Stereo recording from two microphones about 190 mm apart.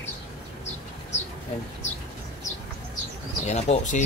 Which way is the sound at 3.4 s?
35° left (ahead or behind).